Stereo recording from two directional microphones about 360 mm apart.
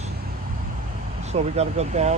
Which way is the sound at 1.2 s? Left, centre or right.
Centre.